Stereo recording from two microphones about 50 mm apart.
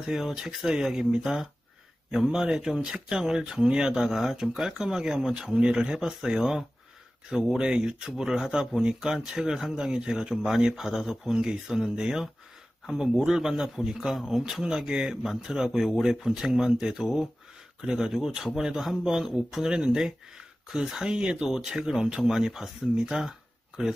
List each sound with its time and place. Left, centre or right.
0.0 s a man's voice: centre